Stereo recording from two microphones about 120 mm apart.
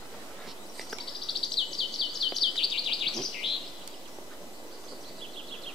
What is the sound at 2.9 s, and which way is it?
Bird, 5° left (ahead or behind).